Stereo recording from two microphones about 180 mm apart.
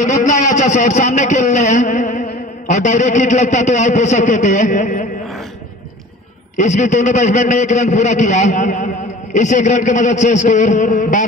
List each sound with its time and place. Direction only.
0.0 s a man's voice: 45° left (ahead or behind)
6.6 s a man's voice: 45° left (ahead or behind)